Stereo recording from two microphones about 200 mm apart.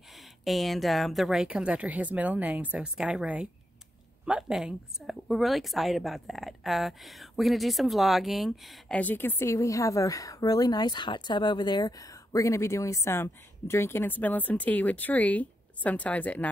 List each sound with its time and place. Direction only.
0.5 s speech: centre (ahead or behind)